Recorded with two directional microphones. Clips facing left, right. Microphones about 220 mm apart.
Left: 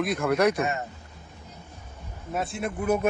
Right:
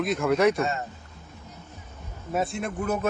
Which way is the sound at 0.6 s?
20° left (ahead or behind).